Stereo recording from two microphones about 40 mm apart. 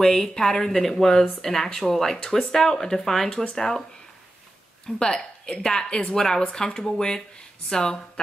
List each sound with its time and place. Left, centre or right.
0.0 s a woman's voice: centre
4.8 s a woman's voice: left